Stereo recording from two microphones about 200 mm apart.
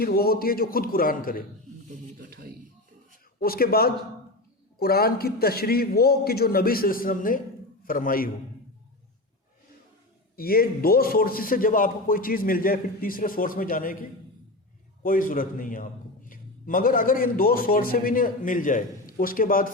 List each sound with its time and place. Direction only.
0.0 s a man's voice: 50° left (ahead or behind)
3.4 s a man's voice: 50° left (ahead or behind)
10.3 s a man's voice: 50° left (ahead or behind)
15.0 s a man's voice: 45° left (ahead or behind)